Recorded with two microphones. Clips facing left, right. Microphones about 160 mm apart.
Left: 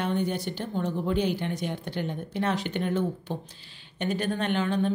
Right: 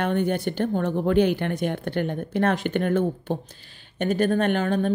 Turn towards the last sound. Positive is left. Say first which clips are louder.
# right 4 dB
turn(degrees=-50)  # may be behind; listen again after turning